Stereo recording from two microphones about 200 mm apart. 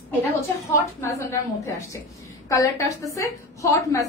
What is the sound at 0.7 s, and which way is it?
A woman's voice, 15° left (ahead or behind).